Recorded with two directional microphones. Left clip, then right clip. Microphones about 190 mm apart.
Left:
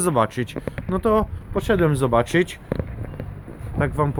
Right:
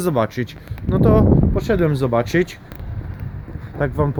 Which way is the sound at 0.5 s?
35° right (ahead or behind).